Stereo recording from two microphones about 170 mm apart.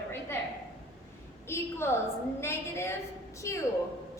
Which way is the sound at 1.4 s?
15° left (ahead or behind).